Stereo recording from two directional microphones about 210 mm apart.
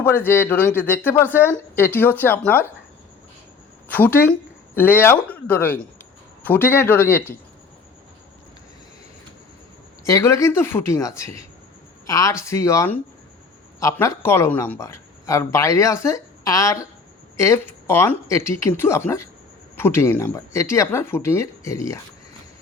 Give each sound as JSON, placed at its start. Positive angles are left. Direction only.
{"t": 0.0, "sound": "speech", "side_deg": 10}
{"t": 3.8, "sound": "speech", "side_deg": 10}
{"t": 10.1, "sound": "speech", "side_deg": 15}